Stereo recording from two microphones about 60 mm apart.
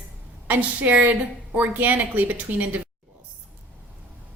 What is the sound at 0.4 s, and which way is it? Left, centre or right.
Speech, right.